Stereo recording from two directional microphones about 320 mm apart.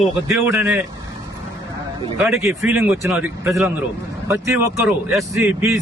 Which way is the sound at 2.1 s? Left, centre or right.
Centre.